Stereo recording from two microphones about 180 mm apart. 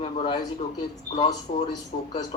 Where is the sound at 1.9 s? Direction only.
30° left (ahead or behind).